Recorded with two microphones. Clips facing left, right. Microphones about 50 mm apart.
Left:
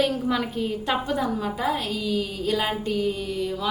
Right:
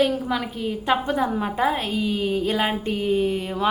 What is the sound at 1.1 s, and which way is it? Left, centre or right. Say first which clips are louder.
A woman's voice: right 2 dB; right.